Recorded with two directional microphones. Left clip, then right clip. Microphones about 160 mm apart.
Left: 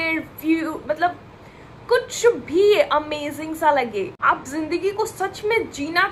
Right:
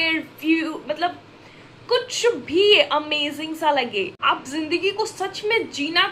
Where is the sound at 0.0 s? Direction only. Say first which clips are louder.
Right 1 dB; 20° right (ahead or behind).